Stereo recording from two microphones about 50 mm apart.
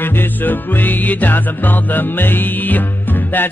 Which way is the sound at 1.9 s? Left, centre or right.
Left.